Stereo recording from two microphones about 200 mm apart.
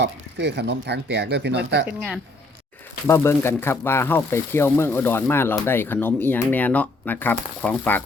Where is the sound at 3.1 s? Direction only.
15° left (ahead or behind).